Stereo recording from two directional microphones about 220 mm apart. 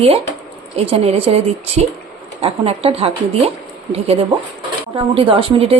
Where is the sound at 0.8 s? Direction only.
25° right (ahead or behind).